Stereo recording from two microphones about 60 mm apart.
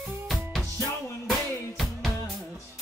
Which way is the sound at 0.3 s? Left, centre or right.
Centre.